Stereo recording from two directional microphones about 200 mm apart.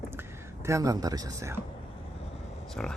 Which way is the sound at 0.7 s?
15° right (ahead or behind).